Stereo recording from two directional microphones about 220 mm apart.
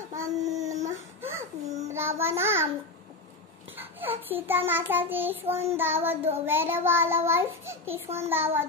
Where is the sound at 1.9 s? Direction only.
10° right (ahead or behind).